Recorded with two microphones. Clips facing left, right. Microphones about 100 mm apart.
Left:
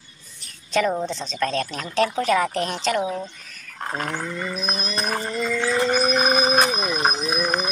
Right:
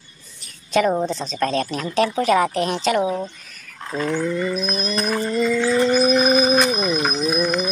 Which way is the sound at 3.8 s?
50° left (ahead or behind).